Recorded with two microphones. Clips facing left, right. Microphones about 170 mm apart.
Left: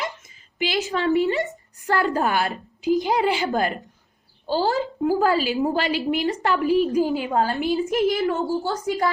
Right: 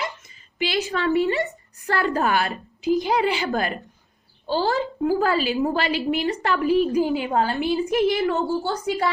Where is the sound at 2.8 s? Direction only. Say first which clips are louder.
Even; 50° left (ahead or behind).